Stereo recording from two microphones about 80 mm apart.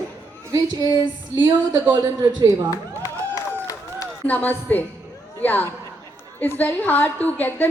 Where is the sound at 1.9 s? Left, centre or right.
Right.